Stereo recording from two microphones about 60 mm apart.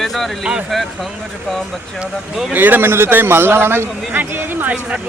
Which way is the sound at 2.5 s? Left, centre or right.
Right.